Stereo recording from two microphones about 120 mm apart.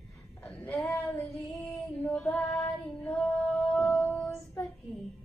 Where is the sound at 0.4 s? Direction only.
15° left (ahead or behind).